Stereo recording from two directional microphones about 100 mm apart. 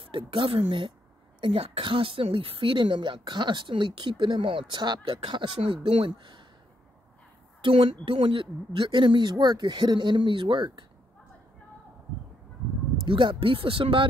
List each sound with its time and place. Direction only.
0.0 s speech: 60° right (ahead or behind)
1.4 s speech: 70° right (ahead or behind); by 6.4 s 55° right (ahead or behind)
7.6 s speech: 65° right (ahead or behind)
13.0 s speech: 55° right (ahead or behind)